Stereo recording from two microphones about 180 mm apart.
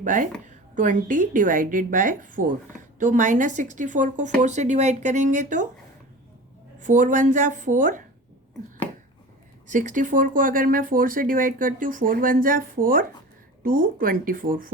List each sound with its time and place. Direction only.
0.0 s a woman's voice: 45° right (ahead or behind)
6.7 s a woman's voice: 45° right (ahead or behind)
9.6 s a woman's voice: 45° right (ahead or behind)